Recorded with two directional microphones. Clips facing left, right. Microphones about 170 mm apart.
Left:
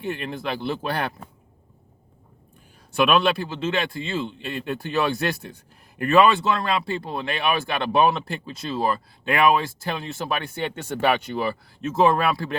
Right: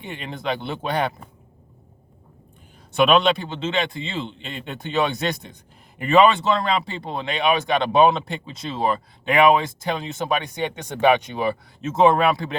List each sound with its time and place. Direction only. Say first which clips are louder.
0.4 s speech: right 1 dB; 20° right (ahead or behind)
2.9 s speech: right 2 dB; 20° right (ahead or behind)